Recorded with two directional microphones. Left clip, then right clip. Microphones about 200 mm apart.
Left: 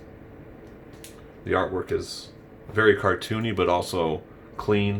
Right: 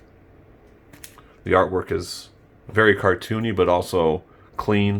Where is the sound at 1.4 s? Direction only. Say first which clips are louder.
Right 6 dB; 20° right (ahead or behind).